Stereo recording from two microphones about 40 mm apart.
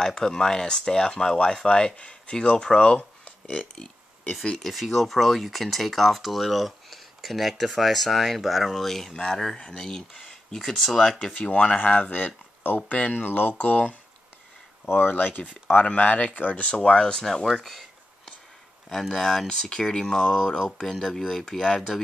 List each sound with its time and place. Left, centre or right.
0.0 s speech: centre
3.4 s a sound: centre
4.6 s speech: centre
11.3 s speech: left
14.9 s speech: left
15.1 s speech: left
16.8 s speech: centre
18.9 s speech: centre
20.2 s speech: centre
21.2 s speech: centre
21.5 s speech: centre